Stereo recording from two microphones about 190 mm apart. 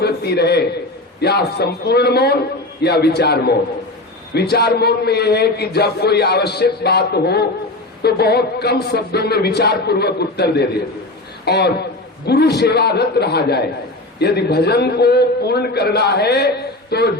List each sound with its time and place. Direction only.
0.0 s a man's voice: 60° left (ahead or behind)